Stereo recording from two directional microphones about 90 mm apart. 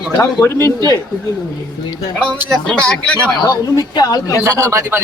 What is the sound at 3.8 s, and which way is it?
Speech, 45° left (ahead or behind).